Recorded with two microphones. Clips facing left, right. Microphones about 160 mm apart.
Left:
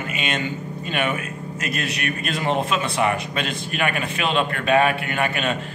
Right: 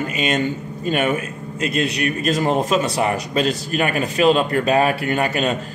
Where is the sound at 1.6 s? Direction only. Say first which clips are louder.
Right 7 dB; 30° right (ahead or behind).